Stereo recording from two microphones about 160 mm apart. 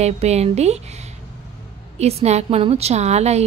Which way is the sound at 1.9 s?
40° right (ahead or behind).